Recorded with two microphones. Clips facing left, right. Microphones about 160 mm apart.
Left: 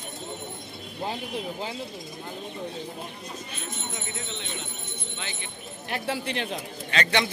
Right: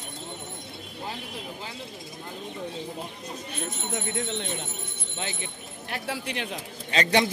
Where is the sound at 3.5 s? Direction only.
60° right (ahead or behind).